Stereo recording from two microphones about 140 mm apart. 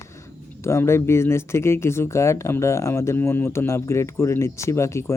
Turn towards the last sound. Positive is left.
turn(degrees=20)  # may be behind; listen again after turning